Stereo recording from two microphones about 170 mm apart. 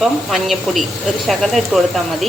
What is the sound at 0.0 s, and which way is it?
Stir, centre (ahead or behind).